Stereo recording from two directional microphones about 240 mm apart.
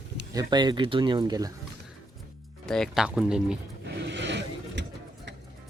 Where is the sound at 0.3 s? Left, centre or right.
Centre.